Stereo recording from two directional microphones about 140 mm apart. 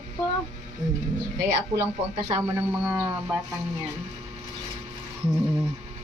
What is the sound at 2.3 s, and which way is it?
Speech, 25° right (ahead or behind).